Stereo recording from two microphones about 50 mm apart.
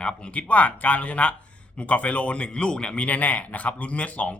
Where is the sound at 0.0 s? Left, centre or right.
Left.